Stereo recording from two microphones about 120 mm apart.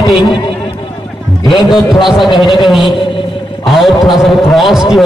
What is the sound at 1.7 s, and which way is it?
A man's voice, 5° right (ahead or behind).